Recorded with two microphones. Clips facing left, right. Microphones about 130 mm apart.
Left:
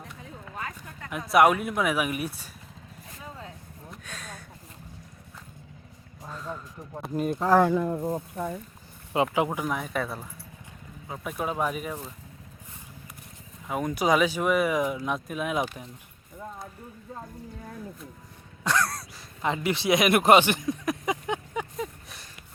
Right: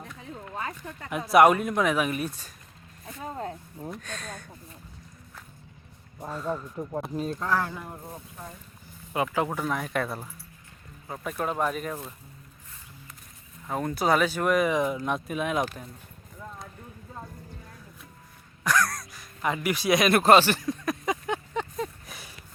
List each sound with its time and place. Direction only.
1.3 s speech: centre (ahead or behind)
3.2 s vehicle: 45° right (ahead or behind)
3.9 s speech: 5° left (ahead or behind)
6.2 s speech: 10° right (ahead or behind)
7.0 s speech: 5° left (ahead or behind)
7.6 s speech: 90° left
9.1 s speech: 20° left (ahead or behind)
9.5 s speech: 5° left (ahead or behind)
13.7 s speech: 10° left (ahead or behind)
18.6 s speech: 25° left (ahead or behind)
21.0 s a sound: 20° left (ahead or behind)
22.0 s horse: centre (ahead or behind)